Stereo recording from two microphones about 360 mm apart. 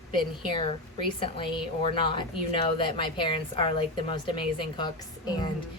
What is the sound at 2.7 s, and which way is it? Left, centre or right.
A woman's voice, centre.